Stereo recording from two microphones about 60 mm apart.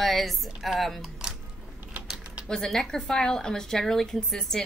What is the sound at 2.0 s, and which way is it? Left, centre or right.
Typing, centre.